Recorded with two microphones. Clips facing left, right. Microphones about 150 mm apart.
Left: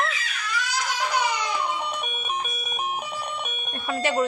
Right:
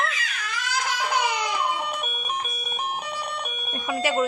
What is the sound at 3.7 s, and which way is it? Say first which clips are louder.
Speech: even; 10° right (ahead or behind).